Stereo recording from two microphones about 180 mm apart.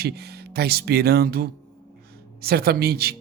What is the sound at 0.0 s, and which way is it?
Speech, 65° right (ahead or behind).